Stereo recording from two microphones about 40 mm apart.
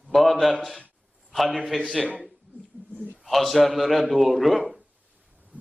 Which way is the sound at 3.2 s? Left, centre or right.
Centre.